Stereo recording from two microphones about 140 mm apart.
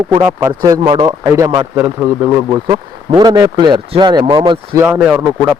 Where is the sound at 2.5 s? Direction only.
35° right (ahead or behind).